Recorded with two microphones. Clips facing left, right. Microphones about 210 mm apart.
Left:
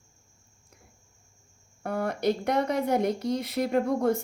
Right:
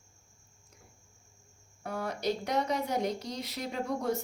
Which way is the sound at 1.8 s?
55° left (ahead or behind).